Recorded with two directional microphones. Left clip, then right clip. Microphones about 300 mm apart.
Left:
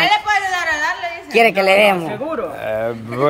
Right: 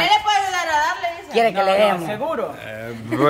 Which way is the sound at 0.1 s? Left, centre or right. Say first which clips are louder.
Left 1 dB; centre.